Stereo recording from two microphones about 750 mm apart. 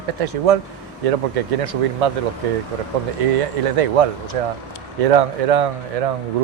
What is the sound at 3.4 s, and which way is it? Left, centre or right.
Speech, right.